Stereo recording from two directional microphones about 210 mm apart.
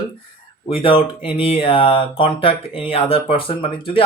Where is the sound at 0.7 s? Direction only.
25° left (ahead or behind).